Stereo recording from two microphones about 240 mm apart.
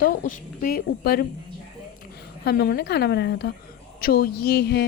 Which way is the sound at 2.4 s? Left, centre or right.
Left.